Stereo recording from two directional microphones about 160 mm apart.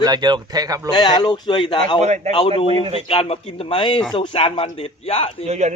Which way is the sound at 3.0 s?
35° left (ahead or behind).